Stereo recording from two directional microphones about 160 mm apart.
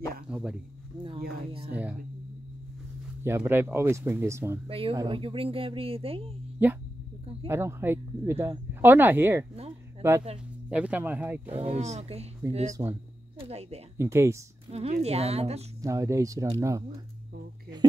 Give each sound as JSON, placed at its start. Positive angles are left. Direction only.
{"t": 0.3, "sound": "a sound", "side_deg": -5}
{"t": 1.7, "sound": "a sound", "side_deg": -10}
{"t": 3.3, "sound": "speech", "side_deg": -15}
{"t": 4.6, "sound": "a woman's voice", "side_deg": -35}
{"t": 7.4, "sound": "speech", "side_deg": -15}
{"t": 11.5, "sound": "a woman's voice", "side_deg": -40}
{"t": 13.9, "sound": "speech", "side_deg": -15}
{"t": 14.7, "sound": "a woman's voice", "side_deg": -40}
{"t": 15.8, "sound": "speech", "side_deg": -20}